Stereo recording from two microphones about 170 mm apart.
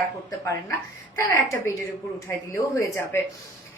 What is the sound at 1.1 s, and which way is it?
A woman's voice, 20° left (ahead or behind).